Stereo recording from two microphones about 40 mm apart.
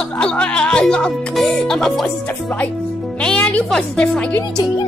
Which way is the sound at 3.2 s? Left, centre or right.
Left.